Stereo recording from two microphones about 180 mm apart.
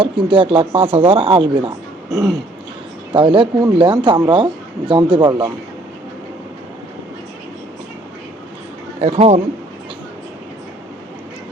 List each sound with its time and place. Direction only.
0.0 s speech: 30° right (ahead or behind)
9.0 s speech: 35° right (ahead or behind)